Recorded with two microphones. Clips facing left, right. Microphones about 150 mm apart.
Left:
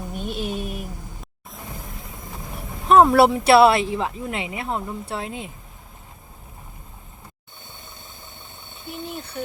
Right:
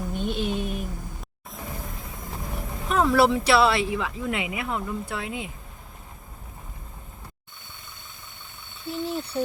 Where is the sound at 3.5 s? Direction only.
60° left (ahead or behind).